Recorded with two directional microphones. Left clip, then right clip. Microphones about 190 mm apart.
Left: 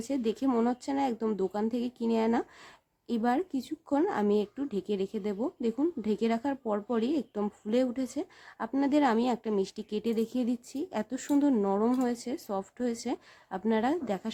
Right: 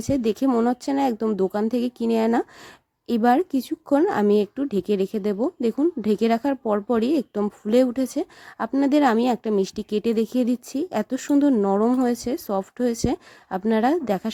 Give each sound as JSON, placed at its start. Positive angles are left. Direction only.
{"t": 0.0, "sound": "speech", "side_deg": -35}